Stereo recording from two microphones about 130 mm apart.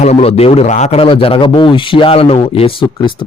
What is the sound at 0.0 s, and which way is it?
A man's voice, 55° left (ahead or behind).